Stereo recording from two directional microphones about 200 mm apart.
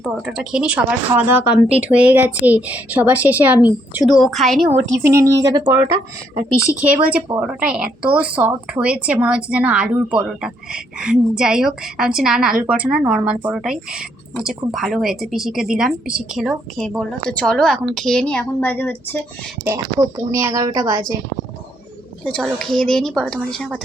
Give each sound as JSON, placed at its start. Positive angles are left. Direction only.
{"t": 0.0, "sound": "speech", "side_deg": 0}
{"t": 4.7, "sound": "speech", "side_deg": -10}
{"t": 6.7, "sound": "speech", "side_deg": -5}
{"t": 19.6, "sound": "speech", "side_deg": -15}
{"t": 22.2, "sound": "speech", "side_deg": 0}